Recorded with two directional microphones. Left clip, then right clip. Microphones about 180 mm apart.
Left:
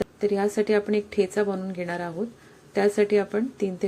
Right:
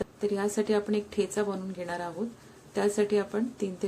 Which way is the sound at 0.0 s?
15° left (ahead or behind).